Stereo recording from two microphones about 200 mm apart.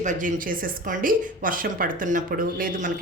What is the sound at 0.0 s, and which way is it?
Speech, 40° right (ahead or behind).